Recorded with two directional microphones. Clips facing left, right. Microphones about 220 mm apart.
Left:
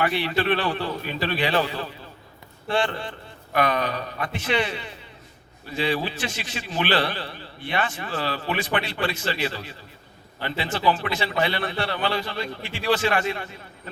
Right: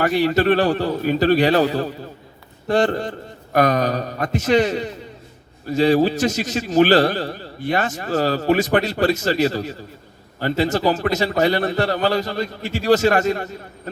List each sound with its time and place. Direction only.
0.0 s a man's voice: 40° right (ahead or behind)